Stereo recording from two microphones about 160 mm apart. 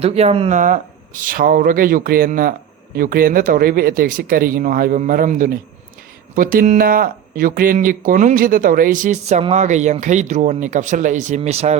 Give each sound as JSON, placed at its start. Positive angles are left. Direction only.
{"t": 0.0, "sound": "speech", "side_deg": -40}